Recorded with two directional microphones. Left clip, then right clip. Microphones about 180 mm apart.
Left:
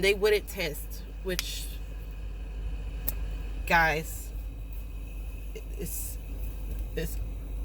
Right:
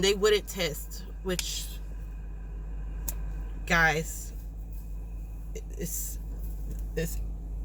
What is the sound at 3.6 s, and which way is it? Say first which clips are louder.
Speech: even; 10° right (ahead or behind).